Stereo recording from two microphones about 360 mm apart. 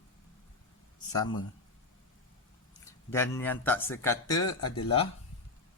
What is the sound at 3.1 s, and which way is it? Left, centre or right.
A man's voice, centre.